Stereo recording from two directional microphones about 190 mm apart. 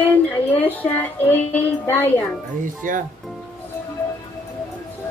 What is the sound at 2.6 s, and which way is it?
Speech, 45° right (ahead or behind).